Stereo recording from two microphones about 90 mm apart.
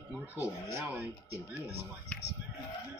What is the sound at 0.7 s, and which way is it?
Speech, 30° right (ahead or behind).